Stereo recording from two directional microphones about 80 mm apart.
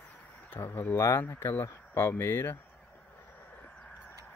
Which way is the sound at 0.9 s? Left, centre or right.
Left.